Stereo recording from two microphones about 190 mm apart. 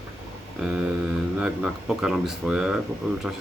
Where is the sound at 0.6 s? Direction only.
5° right (ahead or behind).